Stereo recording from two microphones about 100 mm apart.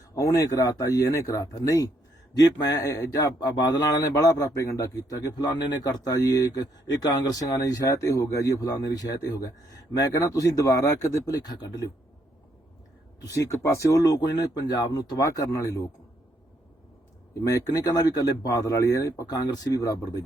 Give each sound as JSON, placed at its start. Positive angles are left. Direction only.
{"t": 0.1, "sound": "a man's voice", "side_deg": 35}
{"t": 13.3, "sound": "a man's voice", "side_deg": 30}
{"t": 17.4, "sound": "a man's voice", "side_deg": 35}